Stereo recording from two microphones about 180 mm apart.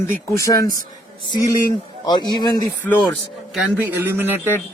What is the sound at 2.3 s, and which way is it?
Speech, 20° left (ahead or behind).